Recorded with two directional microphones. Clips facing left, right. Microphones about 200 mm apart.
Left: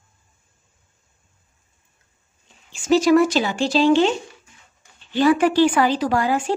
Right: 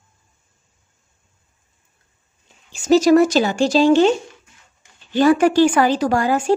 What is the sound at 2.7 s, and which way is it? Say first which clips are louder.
A woman's voice: right 3 dB; 40° right (ahead or behind).